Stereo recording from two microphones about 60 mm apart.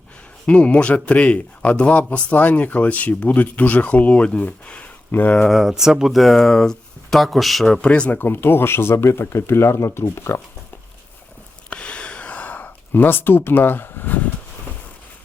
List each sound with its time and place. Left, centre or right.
0.4 s speech: left
5.4 s speech: centre
7.9 s speech: centre
8.1 s speech: left
11.7 s gasp: centre; by 14.2 s left